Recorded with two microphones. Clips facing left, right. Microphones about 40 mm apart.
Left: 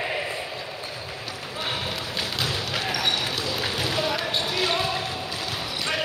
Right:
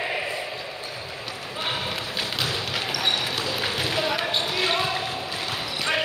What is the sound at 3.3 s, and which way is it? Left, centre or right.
Basketball bounce, centre.